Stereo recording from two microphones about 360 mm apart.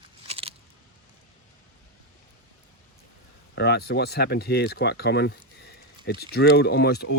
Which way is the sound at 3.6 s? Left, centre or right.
Left.